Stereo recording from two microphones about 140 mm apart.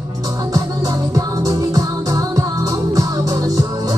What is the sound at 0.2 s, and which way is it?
Music, 25° right (ahead or behind).